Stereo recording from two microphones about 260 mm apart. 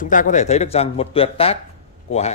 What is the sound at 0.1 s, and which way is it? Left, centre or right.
A man's voice, left.